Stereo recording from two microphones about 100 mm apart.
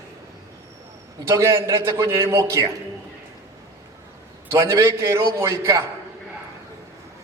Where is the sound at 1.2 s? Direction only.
30° right (ahead or behind).